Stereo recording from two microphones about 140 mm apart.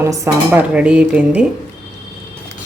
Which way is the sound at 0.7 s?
10° right (ahead or behind).